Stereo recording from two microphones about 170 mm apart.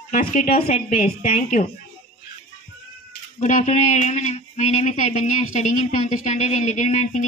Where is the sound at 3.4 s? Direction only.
45° left (ahead or behind).